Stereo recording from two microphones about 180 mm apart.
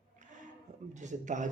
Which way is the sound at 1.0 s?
45° right (ahead or behind).